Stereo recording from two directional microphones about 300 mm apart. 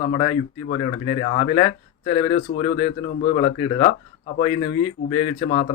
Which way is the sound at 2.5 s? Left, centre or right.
Left.